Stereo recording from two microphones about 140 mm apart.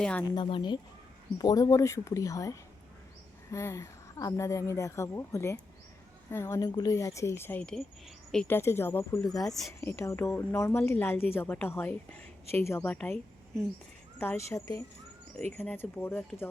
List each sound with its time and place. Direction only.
0.0 s a woman's voice: 10° left (ahead or behind)
0.3 s a woman's voice: 35° left (ahead or behind); by 8.5 s 5° left (ahead or behind)
8.5 s a woman's voice: 15° left (ahead or behind)
9.4 s speech: centre (ahead or behind)
9.8 s a woman's voice: 20° left (ahead or behind)
14.2 s a woman's voice: 20° left (ahead or behind)